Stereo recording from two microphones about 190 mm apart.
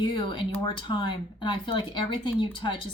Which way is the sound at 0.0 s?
25° left (ahead or behind).